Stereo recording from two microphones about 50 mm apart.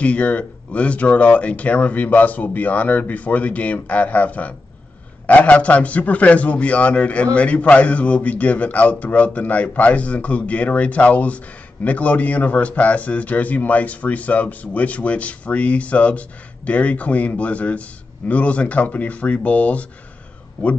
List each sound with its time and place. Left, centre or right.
0.0 s a man's voice: left